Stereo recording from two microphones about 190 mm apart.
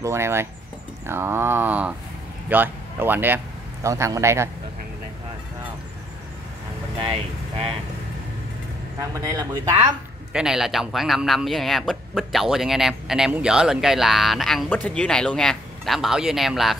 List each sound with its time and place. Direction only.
0.0 s a sound: 15° right (ahead or behind)
2.5 s speech: 10° right (ahead or behind)
3.8 s a sound: 15° right (ahead or behind)
7.1 s speech: 30° right (ahead or behind)
9.2 s speech: 20° right (ahead or behind)
10.3 s speech: 5° right (ahead or behind)